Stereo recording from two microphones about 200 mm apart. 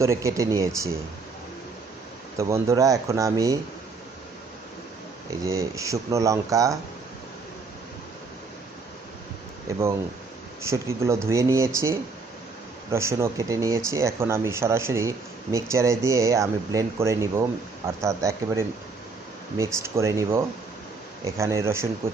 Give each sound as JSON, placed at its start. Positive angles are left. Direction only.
{"t": 0.0, "sound": "speech", "side_deg": -15}
{"t": 2.4, "sound": "speech", "side_deg": -15}
{"t": 5.5, "sound": "speech", "side_deg": -15}
{"t": 9.7, "sound": "speech", "side_deg": -15}